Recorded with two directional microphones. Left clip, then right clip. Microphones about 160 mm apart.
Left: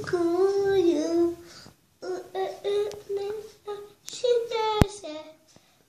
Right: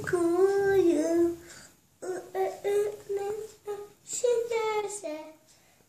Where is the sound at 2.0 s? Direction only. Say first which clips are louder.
Even; 10° right (ahead or behind).